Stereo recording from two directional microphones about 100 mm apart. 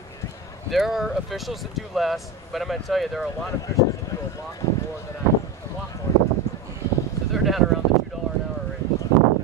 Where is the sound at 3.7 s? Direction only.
25° left (ahead or behind).